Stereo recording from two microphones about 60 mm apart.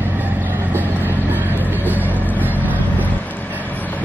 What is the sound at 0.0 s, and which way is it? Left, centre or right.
Vehicle, right.